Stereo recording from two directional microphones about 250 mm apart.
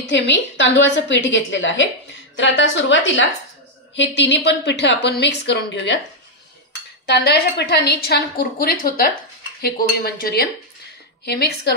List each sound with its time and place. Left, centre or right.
0.1 s a woman's voice: left
7.1 s a woman's voice: left